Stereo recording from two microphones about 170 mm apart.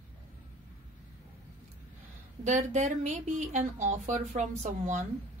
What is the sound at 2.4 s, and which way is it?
Speech, 45° right (ahead or behind).